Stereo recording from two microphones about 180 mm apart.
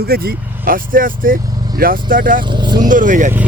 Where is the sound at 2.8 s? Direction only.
45° right (ahead or behind).